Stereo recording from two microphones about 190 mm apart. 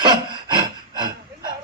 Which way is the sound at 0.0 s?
20° right (ahead or behind).